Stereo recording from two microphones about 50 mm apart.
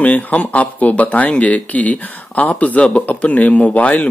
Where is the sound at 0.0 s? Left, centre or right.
Left.